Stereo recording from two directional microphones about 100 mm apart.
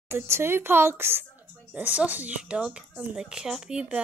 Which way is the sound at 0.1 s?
25° right (ahead or behind).